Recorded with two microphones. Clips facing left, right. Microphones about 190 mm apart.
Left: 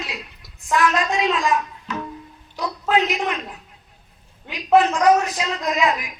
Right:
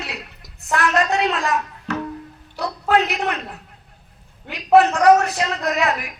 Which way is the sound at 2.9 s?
65° right (ahead or behind).